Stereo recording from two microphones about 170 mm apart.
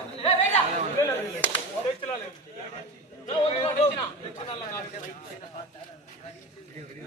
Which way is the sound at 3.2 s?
40° left (ahead or behind).